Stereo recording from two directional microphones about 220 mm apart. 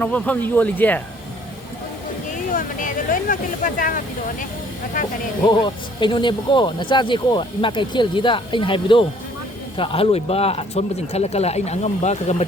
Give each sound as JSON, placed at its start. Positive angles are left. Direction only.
{"t": 0.0, "sound": "speech", "side_deg": 5}
{"t": 2.3, "sound": "speech", "side_deg": 35}
{"t": 5.5, "sound": "speech", "side_deg": 20}